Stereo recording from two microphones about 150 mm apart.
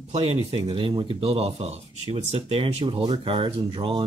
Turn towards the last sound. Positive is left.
turn(degrees=-30)  # may be behind; listen again after turning